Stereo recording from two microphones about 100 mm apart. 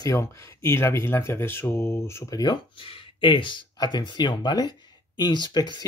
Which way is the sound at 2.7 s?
65° left (ahead or behind).